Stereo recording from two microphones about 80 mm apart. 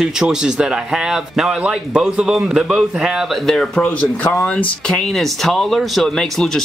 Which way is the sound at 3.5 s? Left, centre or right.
Centre.